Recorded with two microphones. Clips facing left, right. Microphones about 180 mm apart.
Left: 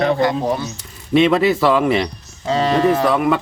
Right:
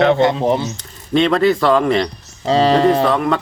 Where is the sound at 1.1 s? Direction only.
5° left (ahead or behind).